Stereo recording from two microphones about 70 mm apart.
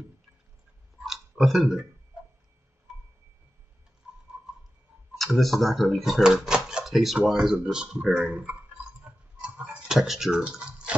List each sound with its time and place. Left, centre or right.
0.9 s clicking: centre
1.3 s speech: centre
5.1 s speech: centre
9.0 s a sound: centre
9.8 s speech: centre
10.4 s a sound: centre